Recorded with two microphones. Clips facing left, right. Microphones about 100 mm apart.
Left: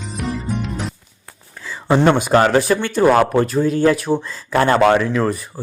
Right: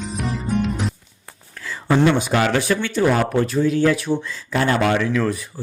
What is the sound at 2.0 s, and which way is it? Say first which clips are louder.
A man's voice: left 4 dB; 50° left (ahead or behind).